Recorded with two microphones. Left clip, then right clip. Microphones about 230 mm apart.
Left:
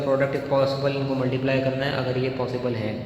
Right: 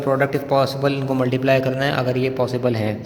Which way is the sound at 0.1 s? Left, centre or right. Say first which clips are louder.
Right 4 dB; right.